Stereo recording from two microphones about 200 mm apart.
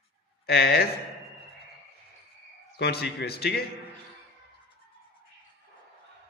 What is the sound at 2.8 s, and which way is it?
Speech, 55° left (ahead or behind).